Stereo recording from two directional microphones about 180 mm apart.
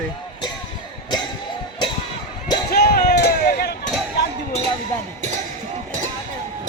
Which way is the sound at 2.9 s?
55° left (ahead or behind).